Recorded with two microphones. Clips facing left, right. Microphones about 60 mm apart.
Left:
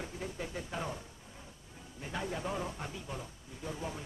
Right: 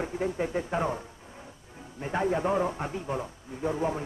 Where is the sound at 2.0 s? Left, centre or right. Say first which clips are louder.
Right 11 dB; right.